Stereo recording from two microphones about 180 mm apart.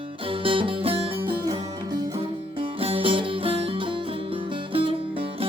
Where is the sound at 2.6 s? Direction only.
30° right (ahead or behind).